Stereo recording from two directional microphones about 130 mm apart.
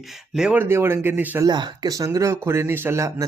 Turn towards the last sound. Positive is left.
turn(degrees=-20)  # may be behind; listen again after turning